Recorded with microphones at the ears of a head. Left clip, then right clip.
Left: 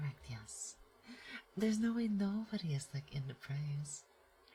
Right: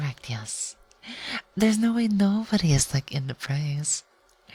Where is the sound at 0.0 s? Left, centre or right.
Right.